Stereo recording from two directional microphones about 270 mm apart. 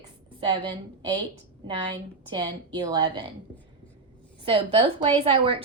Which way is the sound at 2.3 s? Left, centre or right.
Centre.